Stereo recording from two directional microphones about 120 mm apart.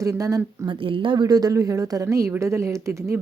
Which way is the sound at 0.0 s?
30° right (ahead or behind).